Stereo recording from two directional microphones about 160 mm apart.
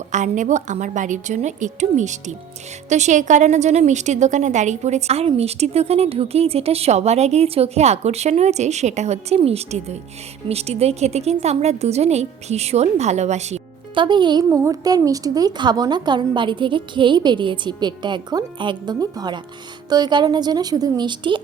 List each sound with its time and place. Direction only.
0.1 s a woman's voice: 50° right (ahead or behind)
13.9 s a woman's voice: 30° right (ahead or behind)